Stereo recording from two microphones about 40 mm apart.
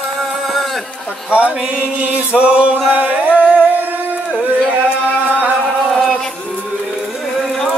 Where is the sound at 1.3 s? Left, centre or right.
Right.